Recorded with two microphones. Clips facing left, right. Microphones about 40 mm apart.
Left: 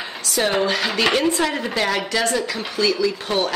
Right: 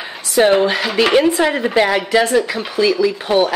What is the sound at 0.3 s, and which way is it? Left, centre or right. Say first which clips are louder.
Speech: right 7 dB; centre.